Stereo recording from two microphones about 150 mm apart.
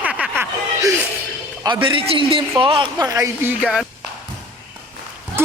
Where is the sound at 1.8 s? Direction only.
35° right (ahead or behind).